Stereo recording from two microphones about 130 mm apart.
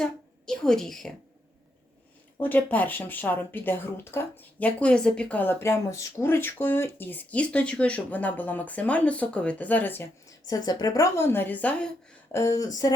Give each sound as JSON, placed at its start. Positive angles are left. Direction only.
{"t": 0.0, "sound": "a woman's voice", "side_deg": 5}
{"t": 2.4, "sound": "speech", "side_deg": 15}
{"t": 12.3, "sound": "a woman's voice", "side_deg": 25}